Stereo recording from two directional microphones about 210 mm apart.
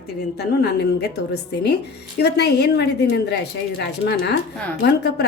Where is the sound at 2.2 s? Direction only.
50° left (ahead or behind).